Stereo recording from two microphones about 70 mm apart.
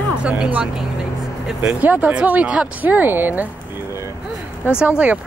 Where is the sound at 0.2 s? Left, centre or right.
Centre.